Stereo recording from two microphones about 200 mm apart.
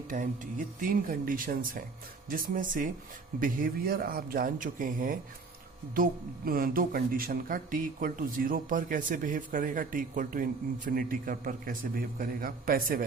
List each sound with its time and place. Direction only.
0.8 s speech: 45° right (ahead or behind)